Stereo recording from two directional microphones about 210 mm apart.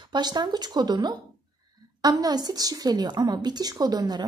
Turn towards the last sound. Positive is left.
turn(degrees=-20)  # may be behind; listen again after turning